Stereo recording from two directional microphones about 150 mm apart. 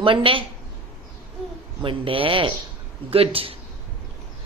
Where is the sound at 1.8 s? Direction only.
35° right (ahead or behind).